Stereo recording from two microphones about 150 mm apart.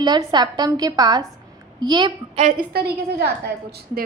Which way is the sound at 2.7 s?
90° right.